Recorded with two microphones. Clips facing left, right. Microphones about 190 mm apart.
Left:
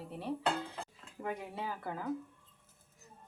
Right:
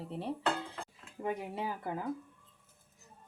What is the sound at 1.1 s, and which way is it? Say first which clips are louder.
Speech: right 3 dB; 20° right (ahead or behind).